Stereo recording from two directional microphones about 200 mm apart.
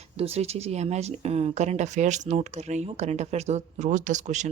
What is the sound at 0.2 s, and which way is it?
Speech, 30° right (ahead or behind).